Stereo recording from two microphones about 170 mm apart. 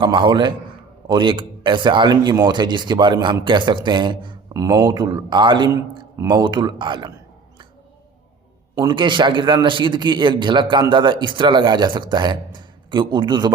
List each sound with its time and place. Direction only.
0.0 s a man's voice: 25° right (ahead or behind)
8.8 s a man's voice: 25° right (ahead or behind)